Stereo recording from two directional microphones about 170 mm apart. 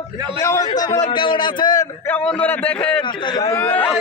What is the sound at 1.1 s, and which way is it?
Speech, 30° left (ahead or behind).